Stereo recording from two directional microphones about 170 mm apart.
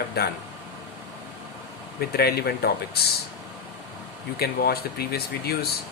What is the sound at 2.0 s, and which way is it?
Speech, 65° left (ahead or behind).